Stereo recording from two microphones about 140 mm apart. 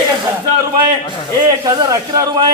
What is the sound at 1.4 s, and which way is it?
A man's voice, 30° right (ahead or behind).